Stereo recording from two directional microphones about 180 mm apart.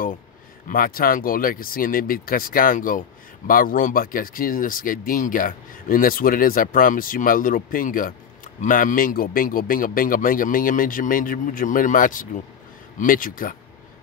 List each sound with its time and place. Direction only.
0.7 s speech: 50° left (ahead or behind)